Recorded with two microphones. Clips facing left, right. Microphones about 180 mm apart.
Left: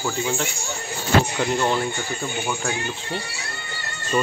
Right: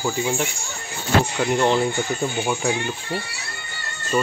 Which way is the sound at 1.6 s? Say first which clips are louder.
Right 3 dB; 20° right (ahead or behind).